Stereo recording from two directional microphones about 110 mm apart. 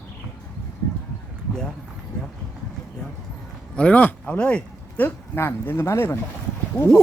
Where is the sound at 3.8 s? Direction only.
10° left (ahead or behind).